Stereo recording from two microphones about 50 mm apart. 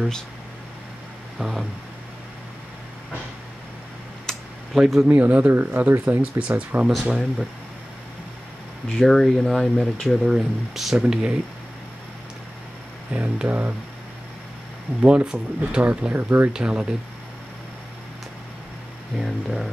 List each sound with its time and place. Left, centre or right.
1.4 s speech: centre
4.3 s computer keyboard: centre
4.7 s speech: centre
5.0 s speech: right
5.5 s speech: right
8.9 s speech: centre
10.2 s speech: centre
13.1 s speech: right
15.0 s speech: right
16.1 s speech: right
16.5 s speech: centre
19.1 s speech: centre